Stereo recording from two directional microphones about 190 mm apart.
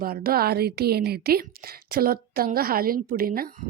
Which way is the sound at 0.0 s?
50° right (ahead or behind).